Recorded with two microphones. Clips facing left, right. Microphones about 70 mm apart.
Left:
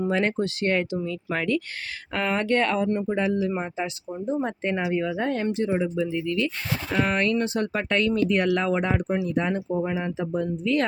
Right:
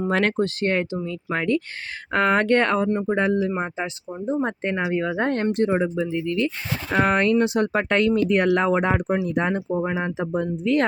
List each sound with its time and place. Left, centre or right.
0.1 s speech: right
0.4 s speech: right
2.1 s speech: right
5.2 s speech: right
6.0 s speech: right